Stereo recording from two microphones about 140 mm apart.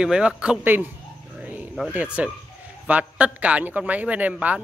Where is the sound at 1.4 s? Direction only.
10° right (ahead or behind).